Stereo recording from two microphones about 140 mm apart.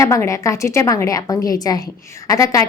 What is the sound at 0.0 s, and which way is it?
A woman's voice, 20° left (ahead or behind).